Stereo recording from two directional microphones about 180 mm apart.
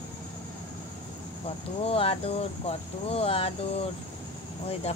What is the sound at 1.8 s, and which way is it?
Speech, 30° left (ahead or behind).